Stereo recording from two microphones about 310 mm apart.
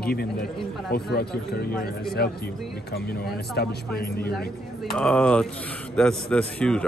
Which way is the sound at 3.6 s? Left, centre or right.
Left.